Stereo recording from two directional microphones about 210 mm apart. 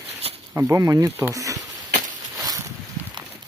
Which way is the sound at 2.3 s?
15° right (ahead or behind).